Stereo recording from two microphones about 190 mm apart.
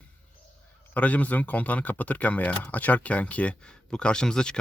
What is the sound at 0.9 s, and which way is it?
Speech, 10° left (ahead or behind).